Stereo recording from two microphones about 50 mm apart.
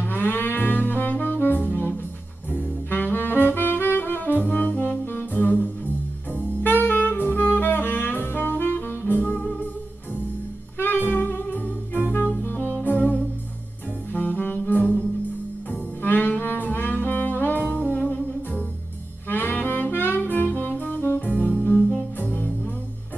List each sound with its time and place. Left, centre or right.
0.1 s music: left
2.5 s saxophone: left
10.8 s music: left
14.1 s saxophone: left
16.0 s music: left
19.2 s saxophone: left
21.6 s music: left